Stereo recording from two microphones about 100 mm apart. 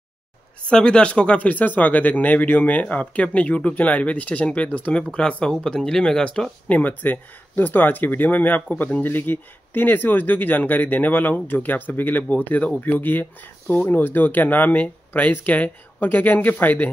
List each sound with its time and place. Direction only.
0.7 s speech: 10° left (ahead or behind)